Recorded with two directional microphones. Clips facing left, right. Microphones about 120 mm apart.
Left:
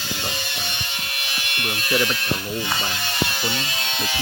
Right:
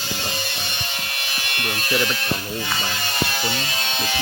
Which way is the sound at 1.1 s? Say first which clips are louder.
Right 1 dB; 35° right (ahead or behind).